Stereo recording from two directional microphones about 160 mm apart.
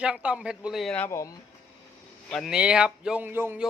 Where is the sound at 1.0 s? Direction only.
20° left (ahead or behind).